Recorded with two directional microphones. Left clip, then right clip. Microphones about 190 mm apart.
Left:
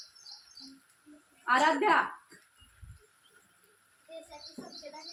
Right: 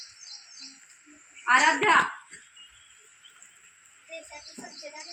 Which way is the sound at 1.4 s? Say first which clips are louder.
Right 5 dB; 40° left (ahead or behind).